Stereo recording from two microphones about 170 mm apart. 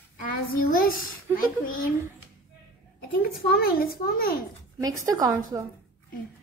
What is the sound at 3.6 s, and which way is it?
Speech, 65° left (ahead or behind).